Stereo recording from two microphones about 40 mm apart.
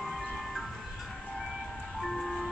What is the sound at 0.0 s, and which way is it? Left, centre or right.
Ice cream truck, centre.